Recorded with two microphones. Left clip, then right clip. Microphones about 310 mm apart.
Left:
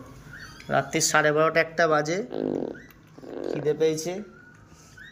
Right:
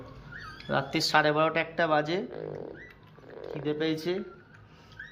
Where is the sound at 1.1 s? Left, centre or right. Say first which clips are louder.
Left 2 dB; centre.